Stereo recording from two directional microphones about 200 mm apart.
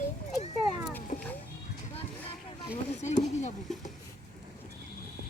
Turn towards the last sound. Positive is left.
turn(degrees=35)  # may be behind; listen again after turning